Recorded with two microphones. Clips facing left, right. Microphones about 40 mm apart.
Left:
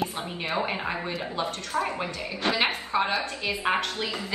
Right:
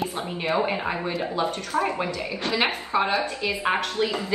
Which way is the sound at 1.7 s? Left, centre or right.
Right.